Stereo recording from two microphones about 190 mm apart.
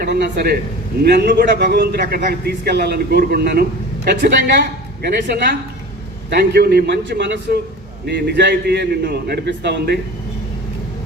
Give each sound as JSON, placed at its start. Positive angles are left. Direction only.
{"t": 0.0, "sound": "a man's voice", "side_deg": -60}